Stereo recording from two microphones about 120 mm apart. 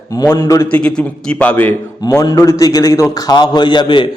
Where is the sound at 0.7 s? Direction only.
10° left (ahead or behind).